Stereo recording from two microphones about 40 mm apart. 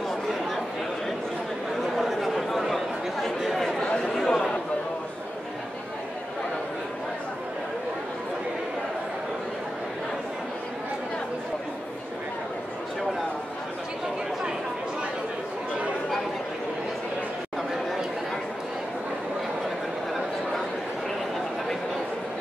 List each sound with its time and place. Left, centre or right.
2.0 s chatter: centre
4.0 s chatter: centre